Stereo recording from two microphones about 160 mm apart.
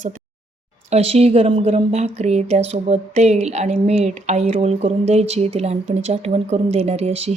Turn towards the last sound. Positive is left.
turn(degrees=-40)  # may be behind; listen again after turning